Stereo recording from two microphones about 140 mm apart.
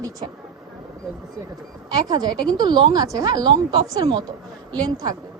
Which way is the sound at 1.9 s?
30° right (ahead or behind).